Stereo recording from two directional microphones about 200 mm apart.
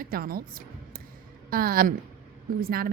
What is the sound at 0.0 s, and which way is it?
A woman's voice, 45° right (ahead or behind).